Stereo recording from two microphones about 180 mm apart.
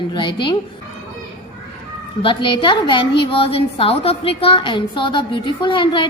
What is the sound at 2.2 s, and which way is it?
A woman's voice, 30° left (ahead or behind).